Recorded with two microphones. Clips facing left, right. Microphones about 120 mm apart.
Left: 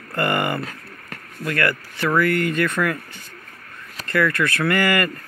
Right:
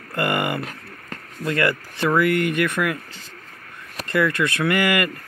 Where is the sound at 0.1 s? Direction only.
15° right (ahead or behind).